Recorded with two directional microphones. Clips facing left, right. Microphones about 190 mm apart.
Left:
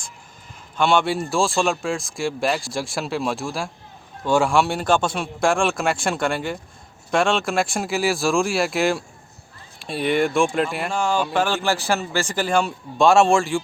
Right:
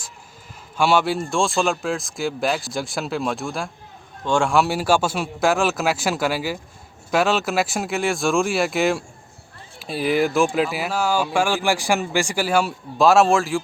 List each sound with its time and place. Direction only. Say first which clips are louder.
0.8 s speech: even; 5° right (ahead or behind)